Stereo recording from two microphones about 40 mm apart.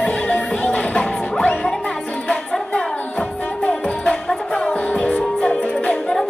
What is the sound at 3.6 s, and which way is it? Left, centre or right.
Music, left.